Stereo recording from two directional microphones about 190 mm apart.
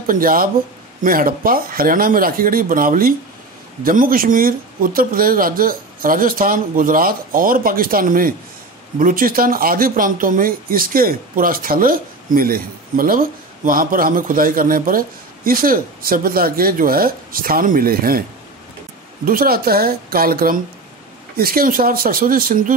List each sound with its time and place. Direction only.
0.0 s speech: 45° right (ahead or behind)
19.2 s speech: 50° right (ahead or behind)